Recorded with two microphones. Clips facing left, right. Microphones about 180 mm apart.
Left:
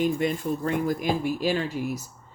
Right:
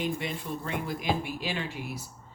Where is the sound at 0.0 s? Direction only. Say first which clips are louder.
Left 8 dB; 45° left (ahead or behind).